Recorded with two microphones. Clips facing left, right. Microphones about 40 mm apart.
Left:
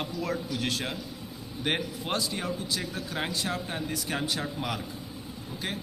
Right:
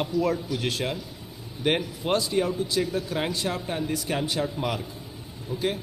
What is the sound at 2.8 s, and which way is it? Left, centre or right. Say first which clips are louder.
Speech: right 7 dB; right.